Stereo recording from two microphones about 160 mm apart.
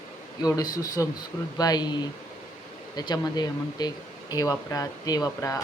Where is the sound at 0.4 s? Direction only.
25° left (ahead or behind).